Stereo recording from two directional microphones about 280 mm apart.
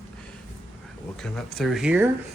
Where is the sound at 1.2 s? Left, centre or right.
Centre.